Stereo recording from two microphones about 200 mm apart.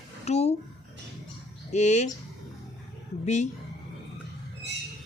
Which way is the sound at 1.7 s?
35° left (ahead or behind).